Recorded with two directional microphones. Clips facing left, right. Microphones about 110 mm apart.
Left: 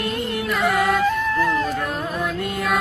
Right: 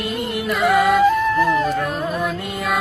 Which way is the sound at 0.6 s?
5° right (ahead or behind).